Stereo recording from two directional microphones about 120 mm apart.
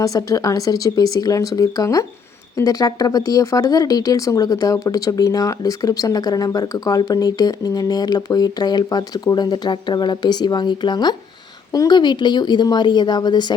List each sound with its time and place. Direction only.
0.0 s speech: 30° left (ahead or behind)